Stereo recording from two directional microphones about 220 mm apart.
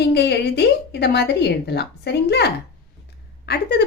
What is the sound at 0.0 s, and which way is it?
A woman's voice, 50° left (ahead or behind).